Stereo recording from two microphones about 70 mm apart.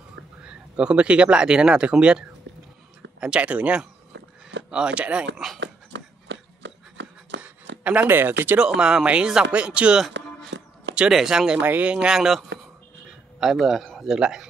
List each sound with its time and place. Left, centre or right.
0.4 s speech: centre
5.4 s speech: centre
7.4 s a sound: right
8.1 s speech: right
8.5 s speech: centre
11.1 s speech: centre
11.6 s speech: right